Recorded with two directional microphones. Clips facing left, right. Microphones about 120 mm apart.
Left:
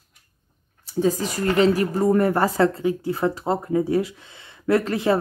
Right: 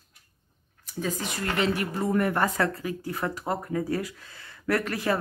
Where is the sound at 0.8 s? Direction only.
35° left (ahead or behind).